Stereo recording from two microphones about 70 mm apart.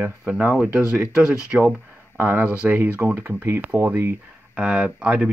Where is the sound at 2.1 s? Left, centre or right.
Right.